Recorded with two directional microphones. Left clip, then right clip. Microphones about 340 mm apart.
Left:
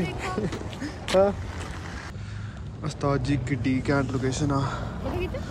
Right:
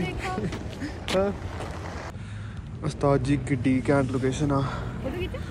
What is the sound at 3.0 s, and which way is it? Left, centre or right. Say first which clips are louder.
Speech: right 3 dB; centre.